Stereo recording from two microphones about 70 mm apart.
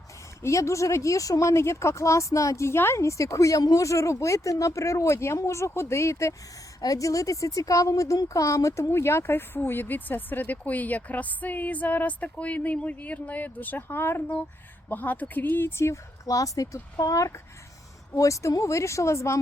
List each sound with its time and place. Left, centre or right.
0.4 s speech: left
6.8 s a woman's voice: left
16.2 s speech: left